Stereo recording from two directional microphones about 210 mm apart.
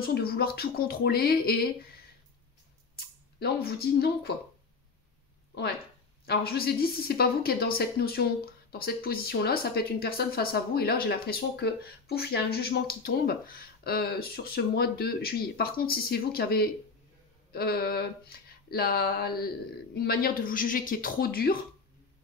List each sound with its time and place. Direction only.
0.0 s speech: 45° left (ahead or behind)
3.3 s speech: 45° left (ahead or behind)
5.5 s speech: 50° left (ahead or behind)
18.3 s a sound: 45° left (ahead or behind)
18.7 s speech: 45° left (ahead or behind)